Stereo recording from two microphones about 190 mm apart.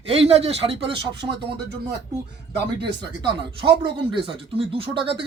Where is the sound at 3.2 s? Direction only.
25° right (ahead or behind).